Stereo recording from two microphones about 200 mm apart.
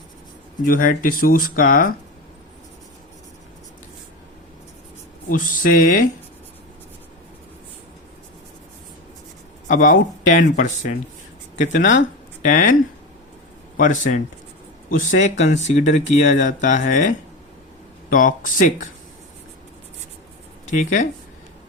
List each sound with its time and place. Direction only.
0.6 s speech: 45° left (ahead or behind)
5.3 s speech: 40° left (ahead or behind)
9.6 s speech: 40° left (ahead or behind)
13.7 s speech: 40° left (ahead or behind)
20.7 s speech: 40° left (ahead or behind)